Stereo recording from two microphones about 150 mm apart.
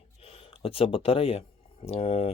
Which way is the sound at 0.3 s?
40° left (ahead or behind).